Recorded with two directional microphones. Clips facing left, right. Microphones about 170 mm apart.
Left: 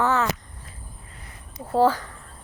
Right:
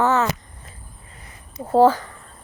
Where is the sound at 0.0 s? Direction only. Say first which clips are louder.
Right 3 dB; 20° right (ahead or behind).